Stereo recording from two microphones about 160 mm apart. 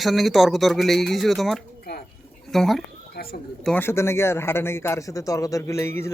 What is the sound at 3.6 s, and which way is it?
Speech, 10° left (ahead or behind).